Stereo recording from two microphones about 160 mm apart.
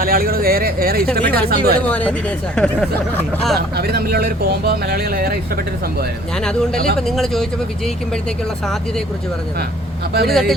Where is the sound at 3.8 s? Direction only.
75° right (ahead or behind).